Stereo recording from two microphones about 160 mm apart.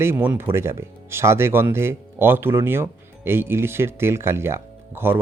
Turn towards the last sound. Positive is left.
turn(degrees=-15)  # may be behind; listen again after turning